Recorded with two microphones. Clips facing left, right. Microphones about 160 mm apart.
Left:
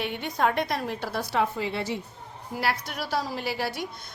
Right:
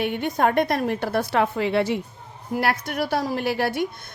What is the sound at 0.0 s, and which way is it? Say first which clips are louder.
A woman's voice: right 5 dB; 50° right (ahead or behind).